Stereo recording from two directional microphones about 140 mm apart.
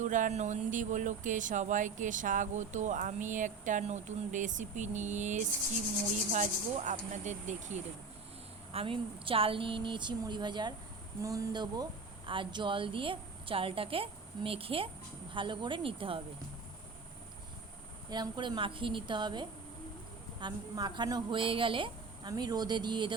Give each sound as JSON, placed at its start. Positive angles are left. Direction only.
{"t": 0.0, "sound": "speech", "side_deg": -65}
{"t": 8.7, "sound": "speech", "side_deg": -40}
{"t": 18.1, "sound": "speech", "side_deg": -35}